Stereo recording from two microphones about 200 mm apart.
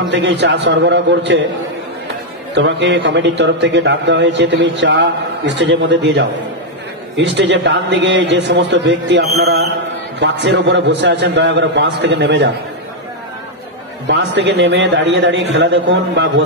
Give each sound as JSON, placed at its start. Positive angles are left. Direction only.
{"t": 0.0, "sound": "a man's voice", "side_deg": -60}
{"t": 2.5, "sound": "a man's voice", "side_deg": -65}
{"t": 14.0, "sound": "a man's voice", "side_deg": -60}